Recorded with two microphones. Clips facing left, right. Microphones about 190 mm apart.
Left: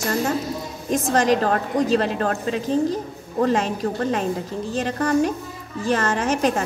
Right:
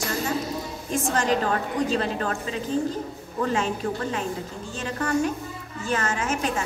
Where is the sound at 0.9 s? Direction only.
40° left (ahead or behind).